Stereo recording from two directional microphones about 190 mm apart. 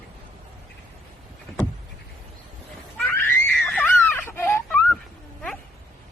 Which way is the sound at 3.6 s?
5° left (ahead or behind).